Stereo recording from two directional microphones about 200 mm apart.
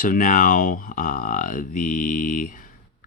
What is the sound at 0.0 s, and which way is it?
Speech, 40° left (ahead or behind).